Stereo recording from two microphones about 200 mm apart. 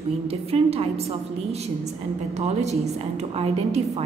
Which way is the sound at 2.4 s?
35° right (ahead or behind).